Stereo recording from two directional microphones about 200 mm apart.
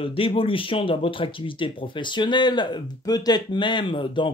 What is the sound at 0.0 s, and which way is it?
Speech, 25° left (ahead or behind).